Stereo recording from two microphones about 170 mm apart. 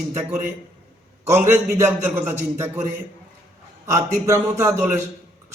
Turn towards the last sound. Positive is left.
turn(degrees=-15)  # may be behind; listen again after turning